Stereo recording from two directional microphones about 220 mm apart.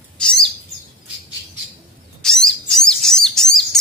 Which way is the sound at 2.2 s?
Centre (ahead or behind).